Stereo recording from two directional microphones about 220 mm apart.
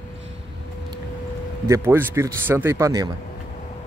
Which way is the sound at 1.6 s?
10° right (ahead or behind).